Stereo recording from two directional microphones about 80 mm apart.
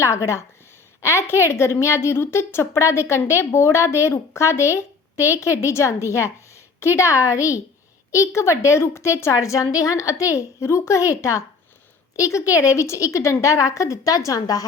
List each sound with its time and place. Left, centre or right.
0.0 s a woman's voice: left